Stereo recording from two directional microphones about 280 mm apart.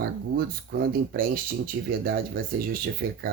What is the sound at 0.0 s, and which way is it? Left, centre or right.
Speech, right.